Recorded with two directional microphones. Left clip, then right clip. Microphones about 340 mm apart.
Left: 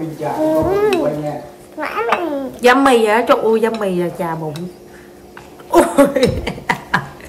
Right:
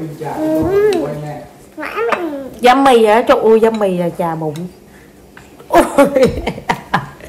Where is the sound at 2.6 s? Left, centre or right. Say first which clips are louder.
Right 3 dB; centre.